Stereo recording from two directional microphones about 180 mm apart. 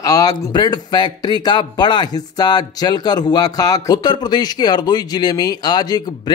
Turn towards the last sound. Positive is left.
turn(degrees=20)  # may be behind; listen again after turning